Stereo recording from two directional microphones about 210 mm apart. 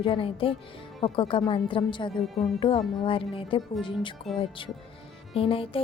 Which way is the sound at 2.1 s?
Centre (ahead or behind).